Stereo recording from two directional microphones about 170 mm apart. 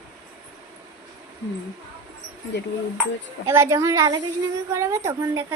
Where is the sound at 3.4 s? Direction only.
15° right (ahead or behind).